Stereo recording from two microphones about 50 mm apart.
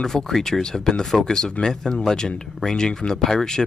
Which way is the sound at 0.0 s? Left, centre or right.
Centre.